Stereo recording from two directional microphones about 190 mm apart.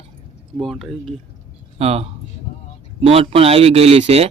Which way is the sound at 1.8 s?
30° right (ahead or behind).